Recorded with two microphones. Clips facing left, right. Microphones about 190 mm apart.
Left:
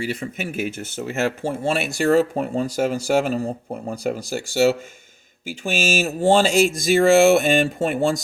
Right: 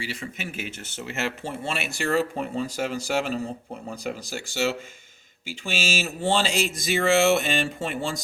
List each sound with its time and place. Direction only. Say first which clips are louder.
0.0 s speech: left 7 dB; 50° left (ahead or behind)